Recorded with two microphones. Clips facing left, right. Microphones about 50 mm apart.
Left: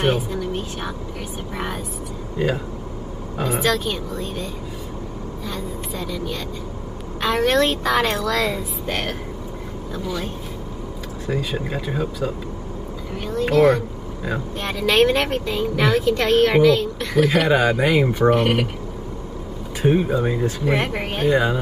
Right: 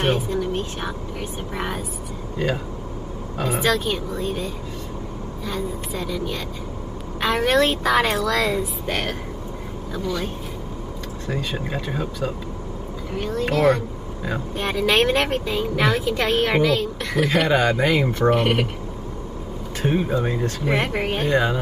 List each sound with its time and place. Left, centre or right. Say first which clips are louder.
0.0 s speech: even; centre
2.3 s speech: left 2 dB; centre
5.5 s speech: right 3 dB; centre
19.8 s speech: left 3 dB; centre